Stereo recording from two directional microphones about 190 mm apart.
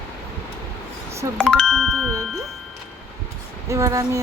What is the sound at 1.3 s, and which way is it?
Doorbell, 5° left (ahead or behind).